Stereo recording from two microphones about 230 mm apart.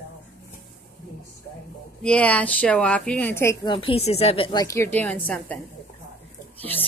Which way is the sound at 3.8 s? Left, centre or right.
Left.